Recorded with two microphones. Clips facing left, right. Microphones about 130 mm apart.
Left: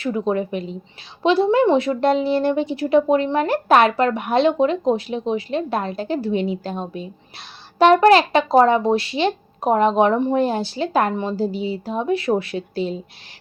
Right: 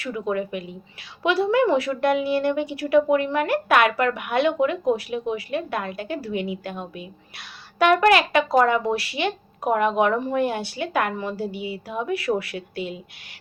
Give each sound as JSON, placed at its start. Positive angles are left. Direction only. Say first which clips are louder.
{"t": 0.0, "sound": "a woman's voice", "louder": "left 5 dB", "side_deg": 30}